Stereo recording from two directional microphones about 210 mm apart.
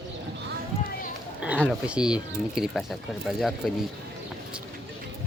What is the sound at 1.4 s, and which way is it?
Speech, 5° right (ahead or behind).